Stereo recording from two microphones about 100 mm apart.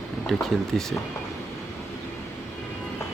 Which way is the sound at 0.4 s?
5° left (ahead or behind).